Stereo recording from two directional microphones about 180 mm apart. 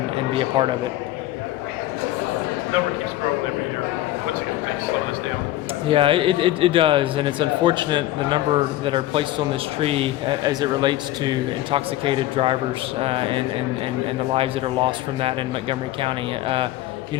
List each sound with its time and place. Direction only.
0.3 s a man's voice: 30° right (ahead or behind)
5.9 s a man's voice: 30° right (ahead or behind)